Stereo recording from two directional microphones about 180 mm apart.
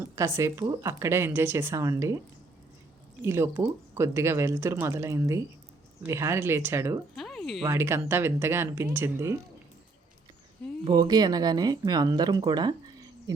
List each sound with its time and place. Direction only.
0.2 s speech: 15° right (ahead or behind)
3.2 s speech: 15° right (ahead or behind)
7.2 s a sound: centre (ahead or behind)
7.6 s speech: 15° right (ahead or behind)
10.8 s speech: 25° right (ahead or behind)